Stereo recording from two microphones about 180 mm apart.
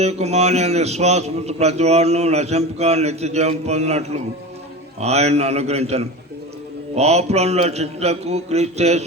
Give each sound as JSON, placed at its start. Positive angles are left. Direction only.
{"t": 0.0, "sound": "a man's voice", "side_deg": -35}